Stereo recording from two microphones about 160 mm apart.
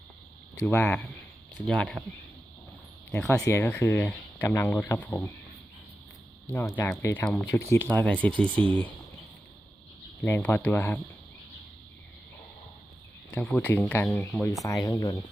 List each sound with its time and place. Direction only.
0.5 s speech: 15° left (ahead or behind)
3.1 s speech: 15° left (ahead or behind)
6.5 s speech: 10° left (ahead or behind)
10.4 s speech: 10° left (ahead or behind)
13.3 s speech: 10° left (ahead or behind)